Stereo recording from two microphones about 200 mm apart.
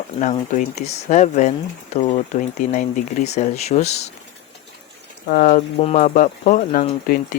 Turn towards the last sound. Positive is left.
turn(degrees=40)  # may be behind; listen again after turning